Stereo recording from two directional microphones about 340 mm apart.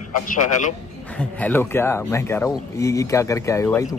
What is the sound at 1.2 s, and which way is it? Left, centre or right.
Speech, centre.